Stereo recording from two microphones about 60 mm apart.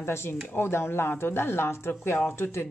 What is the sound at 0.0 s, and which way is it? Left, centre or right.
Speech, left.